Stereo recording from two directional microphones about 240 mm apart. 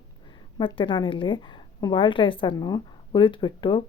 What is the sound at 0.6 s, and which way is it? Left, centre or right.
A woman's voice, left.